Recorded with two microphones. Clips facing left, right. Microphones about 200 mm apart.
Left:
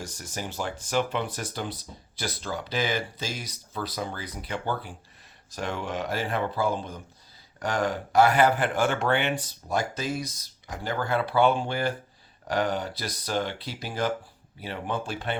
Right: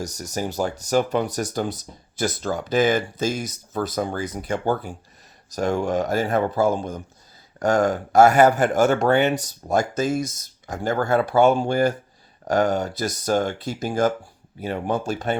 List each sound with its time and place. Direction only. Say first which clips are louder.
0.0 s speech: right 8 dB; 40° right (ahead or behind)